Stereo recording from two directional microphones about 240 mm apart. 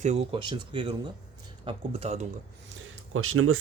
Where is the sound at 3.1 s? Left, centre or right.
Right.